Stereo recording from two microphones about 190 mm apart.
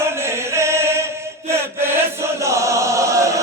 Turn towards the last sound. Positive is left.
turn(degrees=-15)  # may be behind; listen again after turning